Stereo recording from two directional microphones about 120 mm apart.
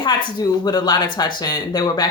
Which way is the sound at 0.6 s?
35° left (ahead or behind).